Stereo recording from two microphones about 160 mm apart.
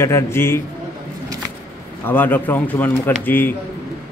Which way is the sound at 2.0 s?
10° left (ahead or behind).